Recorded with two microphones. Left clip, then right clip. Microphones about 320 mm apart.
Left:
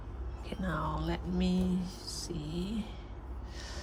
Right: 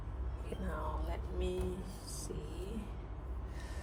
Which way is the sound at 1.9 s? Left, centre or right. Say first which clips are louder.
Left 6 dB; left.